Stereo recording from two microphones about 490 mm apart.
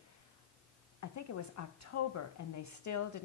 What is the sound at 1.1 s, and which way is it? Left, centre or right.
A woman's voice, left.